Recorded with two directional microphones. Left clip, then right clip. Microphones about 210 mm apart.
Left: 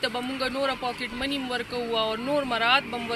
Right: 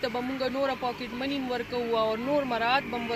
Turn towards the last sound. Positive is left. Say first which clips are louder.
# left 3 dB
turn(degrees=0)  # may be behind; listen again after turning